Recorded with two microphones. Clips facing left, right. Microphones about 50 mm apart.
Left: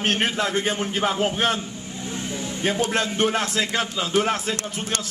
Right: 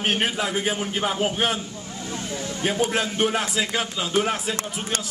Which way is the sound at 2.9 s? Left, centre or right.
Centre.